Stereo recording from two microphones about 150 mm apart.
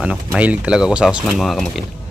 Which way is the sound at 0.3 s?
10° right (ahead or behind).